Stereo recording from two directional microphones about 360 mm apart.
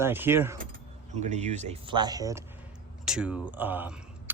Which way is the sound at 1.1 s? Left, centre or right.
Centre.